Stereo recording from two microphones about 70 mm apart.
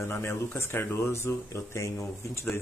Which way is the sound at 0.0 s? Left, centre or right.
Left.